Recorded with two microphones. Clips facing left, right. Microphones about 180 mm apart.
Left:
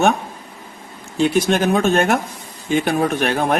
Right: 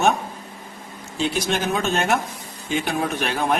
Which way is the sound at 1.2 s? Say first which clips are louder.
Left 7 dB; 55° left (ahead or behind).